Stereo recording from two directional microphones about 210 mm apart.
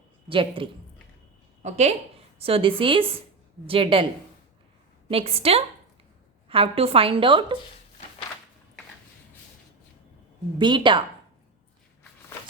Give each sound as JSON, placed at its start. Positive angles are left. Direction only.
{"t": 0.3, "sound": "a woman's voice", "side_deg": -25}
{"t": 5.0, "sound": "a woman's voice", "side_deg": -25}
{"t": 10.6, "sound": "a woman's voice", "side_deg": -20}